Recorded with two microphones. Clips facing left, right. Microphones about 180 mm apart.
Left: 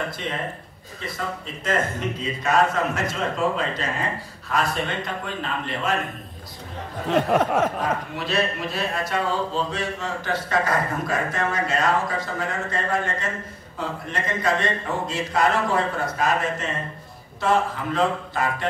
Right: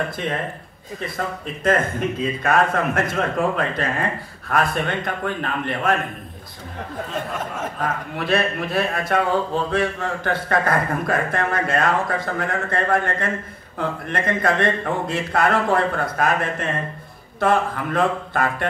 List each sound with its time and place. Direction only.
1.0 s speech: 55° right (ahead or behind)
7.1 s a sound: 70° left (ahead or behind)
7.8 s speech: 55° right (ahead or behind)